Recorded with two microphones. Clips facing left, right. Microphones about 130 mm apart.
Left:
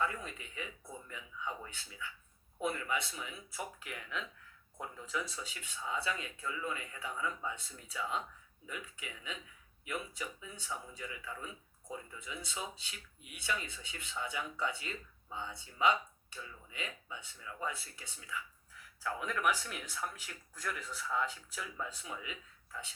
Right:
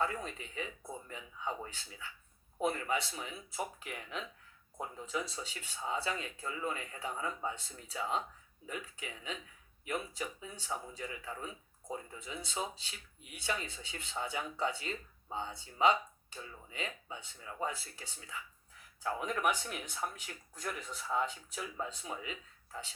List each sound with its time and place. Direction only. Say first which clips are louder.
0.0 s speech: right 1 dB; 30° right (ahead or behind)
22.0 s speech: right 2 dB; 35° right (ahead or behind)